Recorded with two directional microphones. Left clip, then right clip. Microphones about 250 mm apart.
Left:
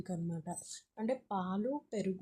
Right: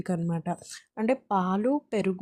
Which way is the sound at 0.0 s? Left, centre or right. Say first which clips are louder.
Right 11 dB; right.